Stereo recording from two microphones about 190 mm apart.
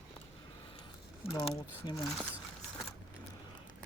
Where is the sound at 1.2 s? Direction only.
30° left (ahead or behind).